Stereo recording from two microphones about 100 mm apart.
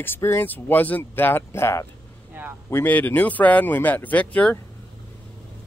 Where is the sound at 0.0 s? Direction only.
25° left (ahead or behind).